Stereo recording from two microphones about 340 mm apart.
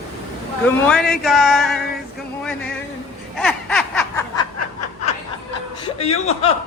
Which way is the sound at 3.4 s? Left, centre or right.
Centre.